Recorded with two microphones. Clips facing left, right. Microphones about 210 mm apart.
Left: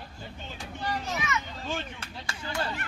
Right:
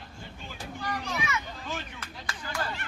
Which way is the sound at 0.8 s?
30° left (ahead or behind).